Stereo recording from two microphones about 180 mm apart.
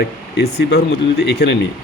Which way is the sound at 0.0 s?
65° left (ahead or behind).